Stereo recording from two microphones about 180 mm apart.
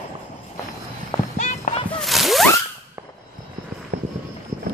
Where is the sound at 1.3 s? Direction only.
40° left (ahead or behind).